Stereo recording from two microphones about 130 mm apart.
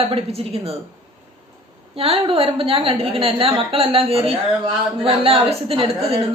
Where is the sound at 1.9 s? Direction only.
45° right (ahead or behind).